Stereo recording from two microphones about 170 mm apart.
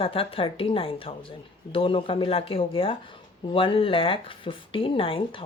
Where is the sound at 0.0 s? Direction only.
35° left (ahead or behind).